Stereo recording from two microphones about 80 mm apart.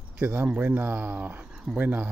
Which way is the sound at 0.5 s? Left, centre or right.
Centre.